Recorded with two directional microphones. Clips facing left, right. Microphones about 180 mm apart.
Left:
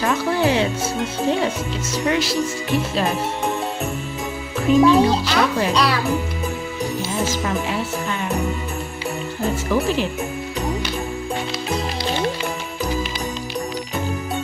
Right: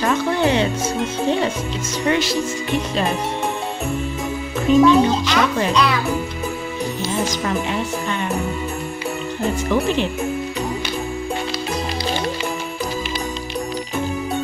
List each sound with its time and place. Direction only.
0.0 s a woman's voice: 5° left (ahead or behind)
4.7 s speech: 5° left (ahead or behind)
5.1 s speech: 35° left (ahead or behind)
7.2 s a woman's voice: 5° left (ahead or behind)
9.7 s a woman's voice: 5° left (ahead or behind)